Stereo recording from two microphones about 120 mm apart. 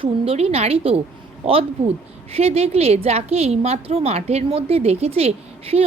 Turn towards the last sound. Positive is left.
turn(degrees=-55)  # may be behind; listen again after turning